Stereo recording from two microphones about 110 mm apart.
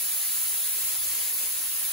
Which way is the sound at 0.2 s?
Centre (ahead or behind).